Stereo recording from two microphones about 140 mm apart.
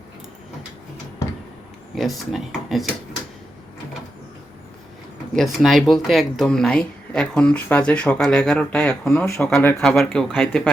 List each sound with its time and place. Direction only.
2.0 s speech: centre (ahead or behind)
5.3 s speech: centre (ahead or behind)
9.9 s speech: centre (ahead or behind)